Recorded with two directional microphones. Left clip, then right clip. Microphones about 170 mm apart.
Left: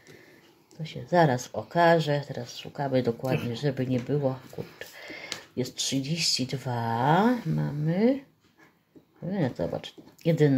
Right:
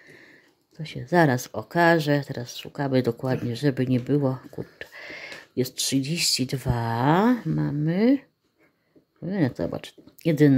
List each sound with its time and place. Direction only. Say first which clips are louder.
0.7 s speech: right 2 dB; 50° right (ahead or behind)
9.3 s speech: right 3 dB; 45° right (ahead or behind)